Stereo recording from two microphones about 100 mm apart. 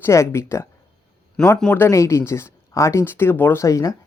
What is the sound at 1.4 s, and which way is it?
Speech, 5° left (ahead or behind).